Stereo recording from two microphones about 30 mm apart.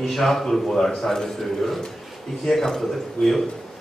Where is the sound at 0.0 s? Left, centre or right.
Centre.